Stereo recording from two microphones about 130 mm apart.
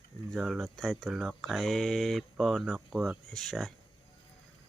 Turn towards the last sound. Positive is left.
turn(degrees=0)  # may be behind; listen again after turning